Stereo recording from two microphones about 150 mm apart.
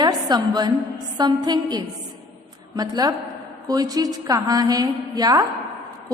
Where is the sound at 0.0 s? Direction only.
30° right (ahead or behind).